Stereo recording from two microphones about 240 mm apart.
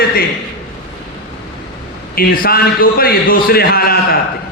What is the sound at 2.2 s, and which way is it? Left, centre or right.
Speech, left.